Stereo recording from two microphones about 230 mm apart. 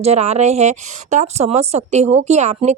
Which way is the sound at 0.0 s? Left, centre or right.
Right.